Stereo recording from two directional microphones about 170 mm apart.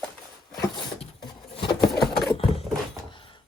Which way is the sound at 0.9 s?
30° left (ahead or behind).